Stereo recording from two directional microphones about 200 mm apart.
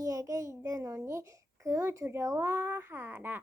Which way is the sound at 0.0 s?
15° right (ahead or behind).